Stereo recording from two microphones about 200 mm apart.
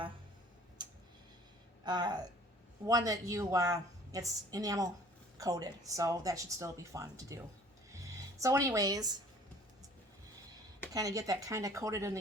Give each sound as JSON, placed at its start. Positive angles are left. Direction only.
{"t": 0.8, "sound": "tick-tock", "side_deg": -20}
{"t": 1.8, "sound": "speech", "side_deg": -20}
{"t": 10.9, "sound": "speech", "side_deg": -15}